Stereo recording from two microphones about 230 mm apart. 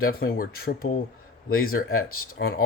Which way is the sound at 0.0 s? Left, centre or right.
Left.